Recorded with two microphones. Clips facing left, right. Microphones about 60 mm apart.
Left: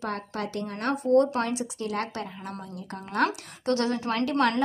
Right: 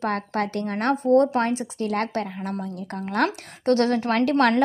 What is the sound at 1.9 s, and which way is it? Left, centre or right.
A woman's voice, right.